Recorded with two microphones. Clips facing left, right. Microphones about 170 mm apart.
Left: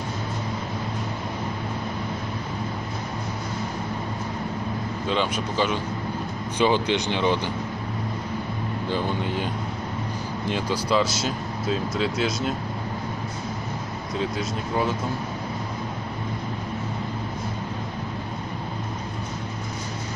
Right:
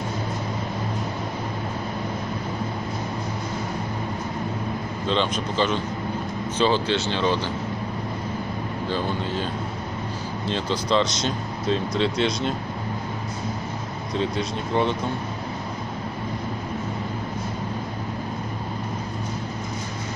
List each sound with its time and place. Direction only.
5.0 s speech: 10° left (ahead or behind)
8.8 s speech: 15° left (ahead or behind)
10.5 s speech: 10° left (ahead or behind)
14.1 s speech: 5° left (ahead or behind)